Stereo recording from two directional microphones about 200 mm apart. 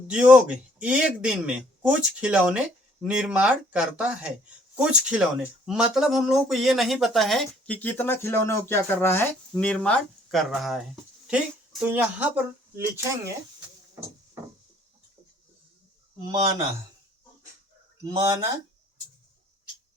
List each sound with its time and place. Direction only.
0.1 s speech: 5° right (ahead or behind)
16.2 s speech: 30° right (ahead or behind)
18.0 s speech: 15° right (ahead or behind)